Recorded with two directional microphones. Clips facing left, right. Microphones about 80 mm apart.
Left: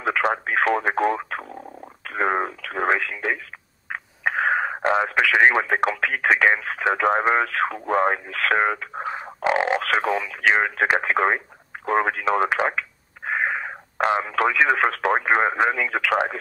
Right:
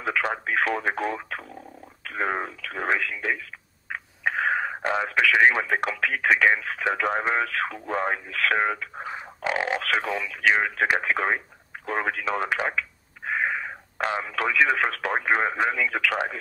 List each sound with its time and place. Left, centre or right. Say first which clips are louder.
0.0 s speech: left 4 dB; left
3.9 s radio: left 2 dB; left
5.9 s speech: left 2 dB; left